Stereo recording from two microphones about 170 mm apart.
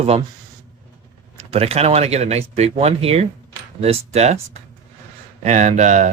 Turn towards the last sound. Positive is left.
turn(degrees=-45)  # may be behind; listen again after turning